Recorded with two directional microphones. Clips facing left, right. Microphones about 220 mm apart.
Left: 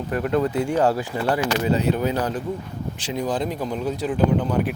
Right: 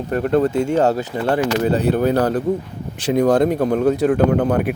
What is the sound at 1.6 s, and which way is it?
Speech, 50° right (ahead or behind).